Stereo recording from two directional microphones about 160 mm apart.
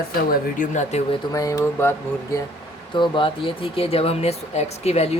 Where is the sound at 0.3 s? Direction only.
50° left (ahead or behind).